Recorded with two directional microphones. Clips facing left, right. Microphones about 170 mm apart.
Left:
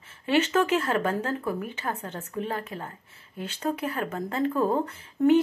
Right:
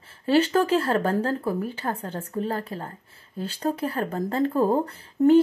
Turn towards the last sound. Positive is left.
turn(degrees=-35)  # may be behind; listen again after turning